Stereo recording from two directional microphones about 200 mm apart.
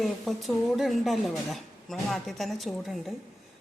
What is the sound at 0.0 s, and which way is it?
Speech, centre (ahead or behind).